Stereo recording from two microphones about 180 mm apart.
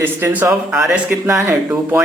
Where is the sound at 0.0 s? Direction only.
10° right (ahead or behind).